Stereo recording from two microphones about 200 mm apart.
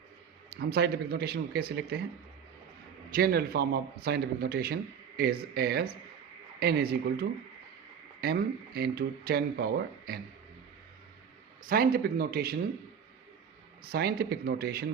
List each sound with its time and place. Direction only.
0.5 s speech: 55° right (ahead or behind)
3.2 s speech: 50° right (ahead or behind)
11.6 s speech: 45° right (ahead or behind)
13.8 s speech: 50° right (ahead or behind)